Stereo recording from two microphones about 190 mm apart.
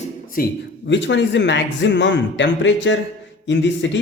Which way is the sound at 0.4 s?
50° left (ahead or behind).